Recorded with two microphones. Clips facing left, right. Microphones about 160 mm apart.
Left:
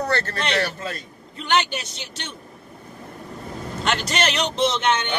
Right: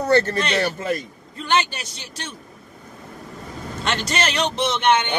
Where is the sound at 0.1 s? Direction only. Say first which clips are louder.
Right 5 dB; 15° right (ahead or behind).